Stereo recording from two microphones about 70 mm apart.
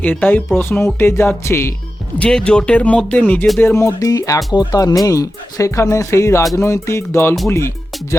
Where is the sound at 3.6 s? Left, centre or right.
Left.